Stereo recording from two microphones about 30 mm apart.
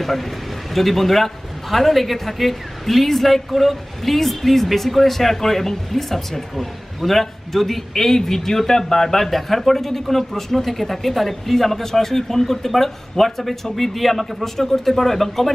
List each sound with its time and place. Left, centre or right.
0.0 s a man's voice: centre